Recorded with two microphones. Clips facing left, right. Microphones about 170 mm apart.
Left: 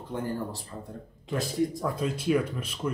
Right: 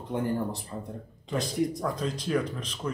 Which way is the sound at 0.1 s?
20° right (ahead or behind).